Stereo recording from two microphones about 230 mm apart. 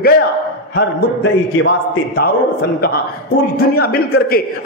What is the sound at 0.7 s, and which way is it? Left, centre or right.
A man's voice, left.